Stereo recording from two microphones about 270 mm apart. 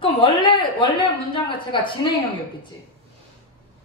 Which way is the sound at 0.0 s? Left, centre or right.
Centre.